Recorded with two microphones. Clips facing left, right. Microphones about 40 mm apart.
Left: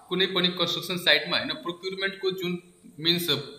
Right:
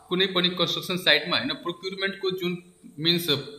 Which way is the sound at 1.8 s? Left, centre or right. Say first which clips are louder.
Even; centre.